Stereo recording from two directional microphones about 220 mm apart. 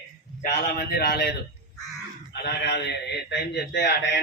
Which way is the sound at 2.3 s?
45° left (ahead or behind).